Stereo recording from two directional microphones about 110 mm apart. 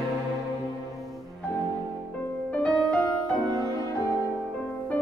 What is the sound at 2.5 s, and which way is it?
Music, 10° left (ahead or behind).